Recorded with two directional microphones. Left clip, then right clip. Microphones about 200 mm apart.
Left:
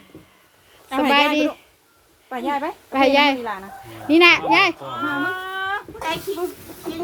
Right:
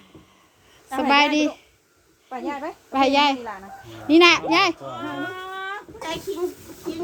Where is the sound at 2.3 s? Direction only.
40° left (ahead or behind).